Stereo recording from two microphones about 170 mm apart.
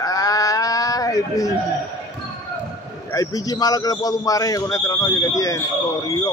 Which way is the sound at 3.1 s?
20° left (ahead or behind).